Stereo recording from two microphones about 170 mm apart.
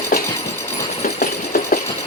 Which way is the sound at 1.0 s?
60° left (ahead or behind).